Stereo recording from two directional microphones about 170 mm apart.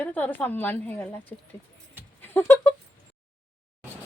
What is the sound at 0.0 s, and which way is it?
A woman's voice, 10° left (ahead or behind).